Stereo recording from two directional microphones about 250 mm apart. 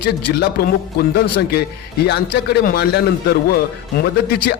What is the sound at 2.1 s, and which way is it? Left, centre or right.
A man's voice, left.